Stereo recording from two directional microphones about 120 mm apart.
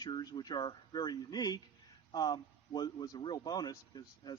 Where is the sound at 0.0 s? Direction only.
35° left (ahead or behind).